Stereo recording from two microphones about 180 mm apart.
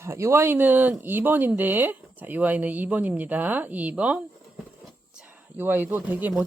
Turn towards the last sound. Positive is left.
turn(degrees=-10)  # may be behind; listen again after turning